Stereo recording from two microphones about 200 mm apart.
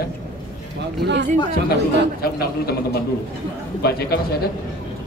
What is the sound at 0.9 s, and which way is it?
Speech, 60° right (ahead or behind).